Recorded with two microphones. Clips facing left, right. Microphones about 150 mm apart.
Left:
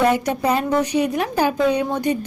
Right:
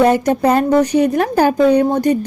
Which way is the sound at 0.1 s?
45° right (ahead or behind).